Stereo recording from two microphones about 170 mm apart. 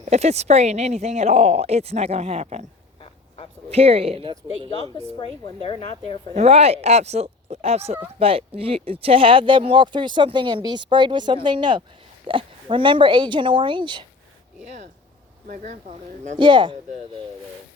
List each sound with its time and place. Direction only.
0.0 s speech: 40° right (ahead or behind)
3.7 s speech: 35° right (ahead or behind)
5.1 s a woman's voice: 25° left (ahead or behind)
6.3 s speech: 40° right (ahead or behind)
15.4 s speech: 55° right (ahead or behind)
16.4 s speech: 30° right (ahead or behind)